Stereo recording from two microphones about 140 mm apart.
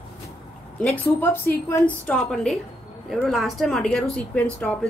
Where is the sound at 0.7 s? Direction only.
10° left (ahead or behind).